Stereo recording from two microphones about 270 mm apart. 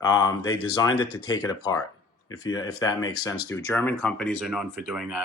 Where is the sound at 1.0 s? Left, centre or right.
Left.